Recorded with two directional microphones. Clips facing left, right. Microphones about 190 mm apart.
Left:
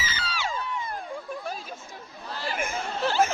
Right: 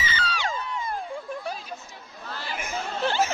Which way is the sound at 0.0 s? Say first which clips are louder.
Right 3 dB; 5° left (ahead or behind).